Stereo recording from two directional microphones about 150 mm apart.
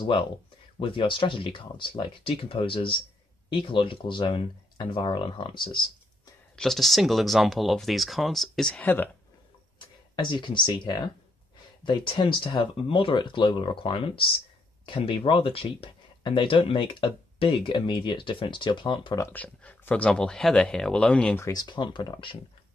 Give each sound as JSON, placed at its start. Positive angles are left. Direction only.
{"t": 0.0, "sound": "speech", "side_deg": 35}
{"t": 6.5, "sound": "speech", "side_deg": 5}
{"t": 10.1, "sound": "speech", "side_deg": 35}
{"t": 19.2, "sound": "speech", "side_deg": 10}
{"t": 21.5, "sound": "speech", "side_deg": 30}